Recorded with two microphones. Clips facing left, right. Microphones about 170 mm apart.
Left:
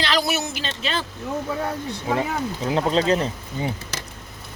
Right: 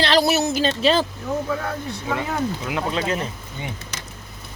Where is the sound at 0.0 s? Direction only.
30° right (ahead or behind).